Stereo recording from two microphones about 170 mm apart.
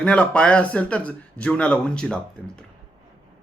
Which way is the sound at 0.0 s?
5° left (ahead or behind).